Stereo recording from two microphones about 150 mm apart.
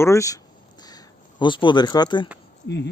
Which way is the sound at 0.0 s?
20° left (ahead or behind).